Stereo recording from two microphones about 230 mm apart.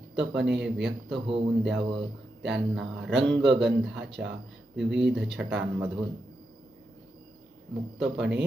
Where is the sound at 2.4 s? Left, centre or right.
Centre.